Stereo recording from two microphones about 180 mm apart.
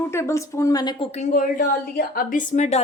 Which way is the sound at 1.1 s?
50° left (ahead or behind).